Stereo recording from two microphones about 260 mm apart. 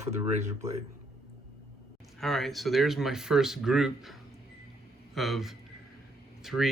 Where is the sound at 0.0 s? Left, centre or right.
Right.